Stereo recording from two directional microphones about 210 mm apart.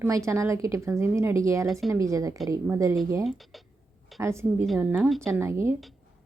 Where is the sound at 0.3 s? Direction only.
15° right (ahead or behind).